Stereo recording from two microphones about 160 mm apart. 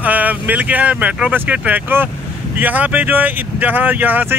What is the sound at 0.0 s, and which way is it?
Speech, 10° right (ahead or behind).